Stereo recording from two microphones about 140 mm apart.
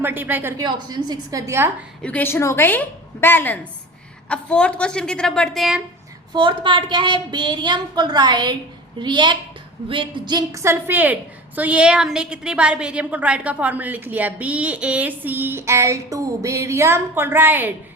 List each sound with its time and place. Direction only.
0.0 s a woman's voice: 15° right (ahead or behind)
0.6 s a woman's voice: 30° right (ahead or behind)
2.0 s a woman's voice: 10° left (ahead or behind)
6.3 s a woman's voice: 35° right (ahead or behind); by 17.7 s 15° right (ahead or behind)